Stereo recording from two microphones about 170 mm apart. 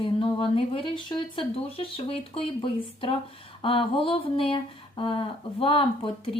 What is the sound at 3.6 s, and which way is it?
A woman's voice, 30° left (ahead or behind).